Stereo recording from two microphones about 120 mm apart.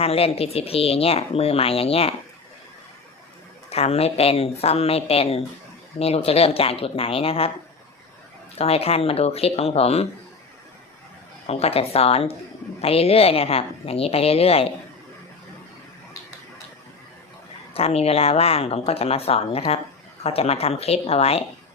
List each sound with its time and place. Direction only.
0.0 s speech: 55° left (ahead or behind)
3.7 s speech: 60° left (ahead or behind)
8.5 s speech: 55° left (ahead or behind)
11.4 s speech: 55° left (ahead or behind)
17.7 s speech: 55° left (ahead or behind)